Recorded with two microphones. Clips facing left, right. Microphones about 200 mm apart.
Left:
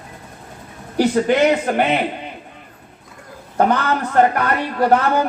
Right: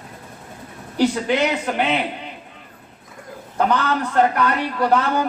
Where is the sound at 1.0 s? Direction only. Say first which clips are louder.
Left 4 dB; 50° left (ahead or behind).